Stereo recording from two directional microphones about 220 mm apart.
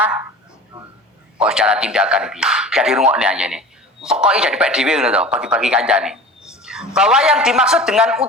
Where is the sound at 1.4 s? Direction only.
5° right (ahead or behind).